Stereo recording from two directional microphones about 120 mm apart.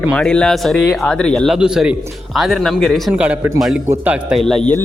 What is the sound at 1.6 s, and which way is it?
Speech, 5° right (ahead or behind).